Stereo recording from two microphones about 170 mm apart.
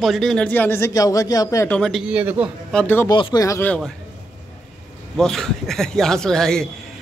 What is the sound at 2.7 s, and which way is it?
Speech, 10° left (ahead or behind).